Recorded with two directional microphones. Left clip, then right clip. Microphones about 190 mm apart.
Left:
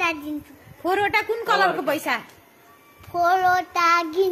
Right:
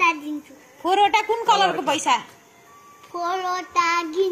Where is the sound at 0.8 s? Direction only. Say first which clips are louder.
Right 3 dB; 10° left (ahead or behind).